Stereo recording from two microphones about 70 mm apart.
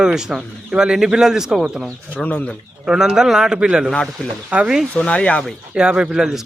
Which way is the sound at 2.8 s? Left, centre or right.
Centre.